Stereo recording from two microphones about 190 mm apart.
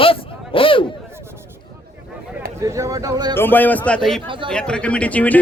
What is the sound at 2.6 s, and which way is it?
Speech, 15° right (ahead or behind).